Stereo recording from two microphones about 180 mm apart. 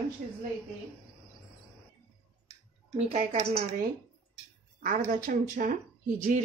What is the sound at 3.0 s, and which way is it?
Speech, 35° right (ahead or behind).